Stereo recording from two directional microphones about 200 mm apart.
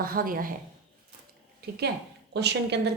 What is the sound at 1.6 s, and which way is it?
A woman's voice, 55° right (ahead or behind).